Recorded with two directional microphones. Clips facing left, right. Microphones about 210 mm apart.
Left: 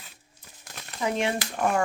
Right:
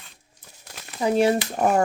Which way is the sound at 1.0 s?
35° right (ahead or behind).